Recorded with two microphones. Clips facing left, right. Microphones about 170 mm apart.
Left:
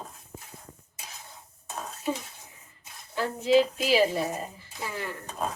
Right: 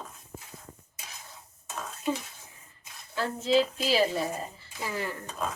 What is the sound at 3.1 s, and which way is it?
A woman's voice, 15° left (ahead or behind).